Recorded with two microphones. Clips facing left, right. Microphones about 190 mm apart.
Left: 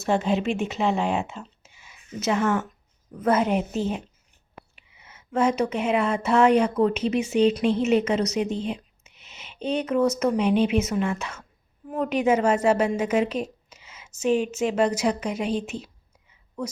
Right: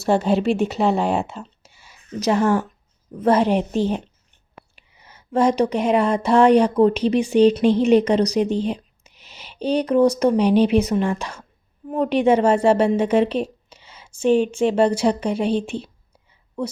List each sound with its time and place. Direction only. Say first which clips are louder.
0.0 s a woman's voice: right 5 dB; 35° right (ahead or behind)